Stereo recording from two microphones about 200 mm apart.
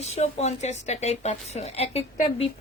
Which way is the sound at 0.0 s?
35° left (ahead or behind).